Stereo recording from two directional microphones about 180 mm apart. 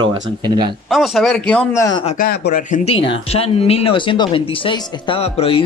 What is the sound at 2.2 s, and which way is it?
Speech, 50° left (ahead or behind).